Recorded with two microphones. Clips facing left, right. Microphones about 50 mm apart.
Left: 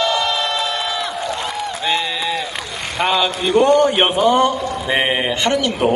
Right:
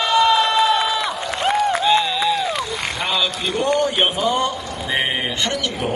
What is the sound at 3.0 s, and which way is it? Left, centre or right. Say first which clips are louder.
A man's voice: left 7 dB; left.